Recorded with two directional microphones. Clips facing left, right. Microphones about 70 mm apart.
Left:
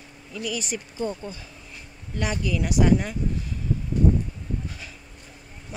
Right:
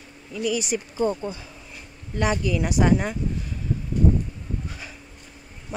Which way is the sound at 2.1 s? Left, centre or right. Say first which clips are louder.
Right 4 dB; right.